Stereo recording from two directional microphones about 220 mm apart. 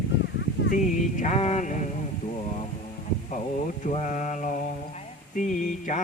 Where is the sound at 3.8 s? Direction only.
35° left (ahead or behind).